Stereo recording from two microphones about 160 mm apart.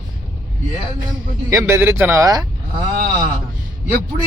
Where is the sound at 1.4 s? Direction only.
15° right (ahead or behind).